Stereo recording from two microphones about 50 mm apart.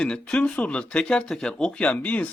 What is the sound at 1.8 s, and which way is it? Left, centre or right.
Speech, left.